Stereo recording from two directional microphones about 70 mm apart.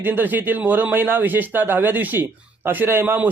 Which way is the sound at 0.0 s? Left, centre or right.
Right.